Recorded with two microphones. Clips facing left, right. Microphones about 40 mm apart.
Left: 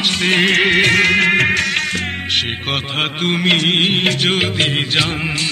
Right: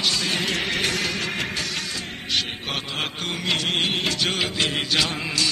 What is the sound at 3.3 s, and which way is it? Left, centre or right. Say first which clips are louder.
Music: left 10 dB; left.